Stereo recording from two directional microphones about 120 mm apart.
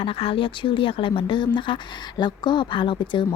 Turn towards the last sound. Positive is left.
turn(degrees=40)  # may be behind; listen again after turning